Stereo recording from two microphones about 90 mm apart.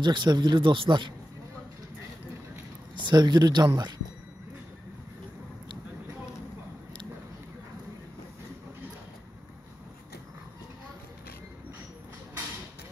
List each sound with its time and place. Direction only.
0.0 s speech: 60° right (ahead or behind)
3.0 s speech: 55° right (ahead or behind)